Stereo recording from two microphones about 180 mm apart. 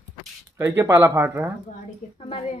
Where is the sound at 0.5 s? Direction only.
10° right (ahead or behind).